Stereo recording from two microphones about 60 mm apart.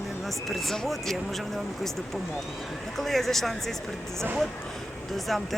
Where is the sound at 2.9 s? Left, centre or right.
Centre.